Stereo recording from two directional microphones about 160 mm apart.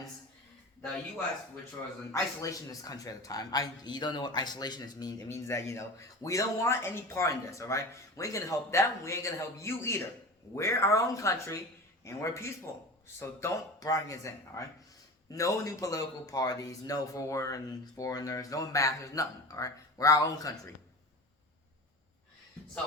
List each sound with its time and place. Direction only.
2.1 s a man's voice: 20° left (ahead or behind)